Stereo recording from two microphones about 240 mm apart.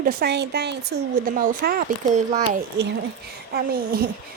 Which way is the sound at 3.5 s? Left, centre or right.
Right.